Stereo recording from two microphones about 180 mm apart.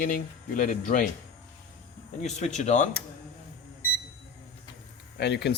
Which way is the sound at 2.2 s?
40° left (ahead or behind).